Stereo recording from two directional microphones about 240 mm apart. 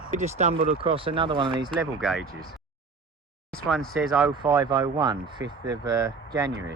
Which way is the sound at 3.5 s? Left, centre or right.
Centre.